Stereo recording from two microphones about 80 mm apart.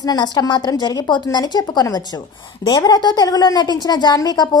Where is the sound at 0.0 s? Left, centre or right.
Left.